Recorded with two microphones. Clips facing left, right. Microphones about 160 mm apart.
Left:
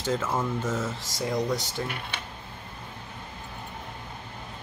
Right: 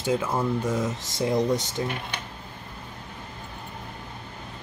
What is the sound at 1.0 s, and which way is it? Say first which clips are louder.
Speech: right 6 dB; 25° right (ahead or behind).